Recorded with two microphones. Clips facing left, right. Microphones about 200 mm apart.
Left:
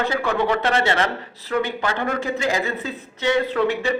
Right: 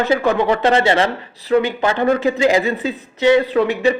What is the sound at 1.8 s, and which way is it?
A man's voice, 20° right (ahead or behind).